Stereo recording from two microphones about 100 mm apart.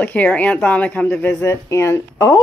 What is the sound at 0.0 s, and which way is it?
Speech, 15° left (ahead or behind).